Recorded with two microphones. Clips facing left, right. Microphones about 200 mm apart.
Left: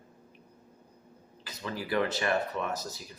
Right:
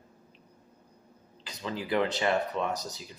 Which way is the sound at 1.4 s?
20° right (ahead or behind).